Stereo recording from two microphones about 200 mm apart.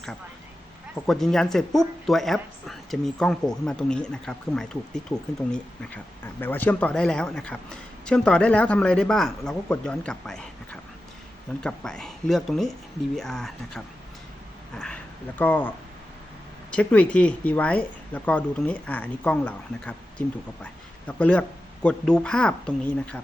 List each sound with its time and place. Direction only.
1.0 s speech: centre (ahead or behind)
11.6 s speech: 5° left (ahead or behind)
15.4 s speech: 10° left (ahead or behind)
16.7 s speech: 5° left (ahead or behind)